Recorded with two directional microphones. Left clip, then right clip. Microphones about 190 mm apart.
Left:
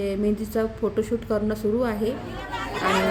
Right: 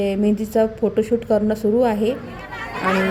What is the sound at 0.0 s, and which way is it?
A woman's voice, 15° right (ahead or behind).